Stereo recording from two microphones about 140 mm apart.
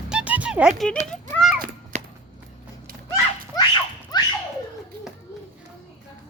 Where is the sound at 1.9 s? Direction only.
55° right (ahead or behind).